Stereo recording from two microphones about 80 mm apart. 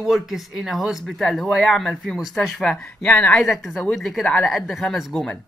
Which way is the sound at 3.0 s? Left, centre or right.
Centre.